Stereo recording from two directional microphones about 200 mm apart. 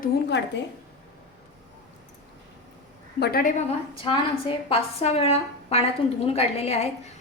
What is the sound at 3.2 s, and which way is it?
Speech, 45° left (ahead or behind).